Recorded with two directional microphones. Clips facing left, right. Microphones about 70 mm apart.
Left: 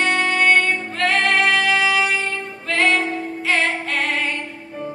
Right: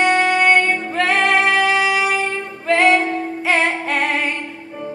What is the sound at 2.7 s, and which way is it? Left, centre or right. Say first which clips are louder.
Female singing: right 4 dB; right.